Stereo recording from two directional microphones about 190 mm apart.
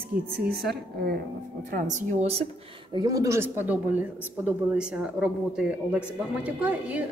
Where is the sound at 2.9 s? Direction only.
20° right (ahead or behind).